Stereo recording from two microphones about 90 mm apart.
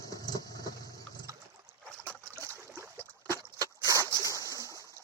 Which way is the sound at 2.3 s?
30° right (ahead or behind).